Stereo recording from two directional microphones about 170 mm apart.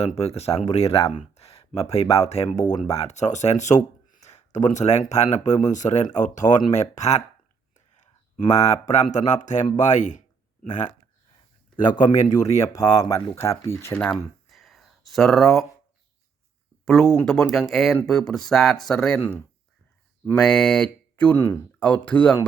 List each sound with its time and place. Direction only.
0.0 s speech: 35° left (ahead or behind)
8.5 s speech: 40° left (ahead or behind)
11.9 s speech: 25° left (ahead or behind); by 14.2 s 10° left (ahead or behind)
14.4 s a sound: centre (ahead or behind)
16.8 s speech: centre (ahead or behind)